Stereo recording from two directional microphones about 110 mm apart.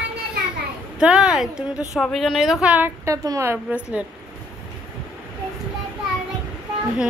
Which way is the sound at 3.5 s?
15° right (ahead or behind).